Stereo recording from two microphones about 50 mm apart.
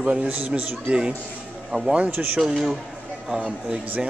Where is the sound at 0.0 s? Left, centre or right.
Right.